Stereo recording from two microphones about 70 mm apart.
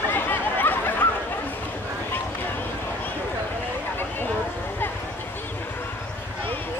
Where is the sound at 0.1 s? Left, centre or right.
Left.